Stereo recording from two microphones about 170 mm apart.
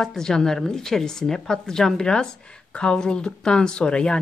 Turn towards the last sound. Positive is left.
turn(degrees=5)  # may be behind; listen again after turning